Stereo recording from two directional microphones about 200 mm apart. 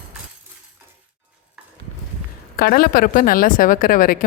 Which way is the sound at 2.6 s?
50° left (ahead or behind).